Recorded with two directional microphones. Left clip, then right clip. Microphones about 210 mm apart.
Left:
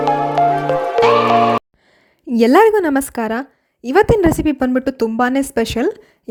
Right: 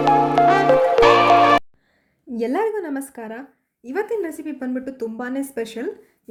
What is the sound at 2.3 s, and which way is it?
A woman's voice, 45° left (ahead or behind).